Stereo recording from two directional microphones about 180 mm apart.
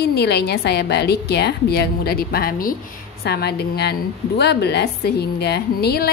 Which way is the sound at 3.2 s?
65° left (ahead or behind).